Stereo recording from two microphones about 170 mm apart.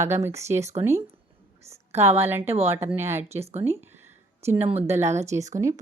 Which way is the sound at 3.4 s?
40° right (ahead or behind).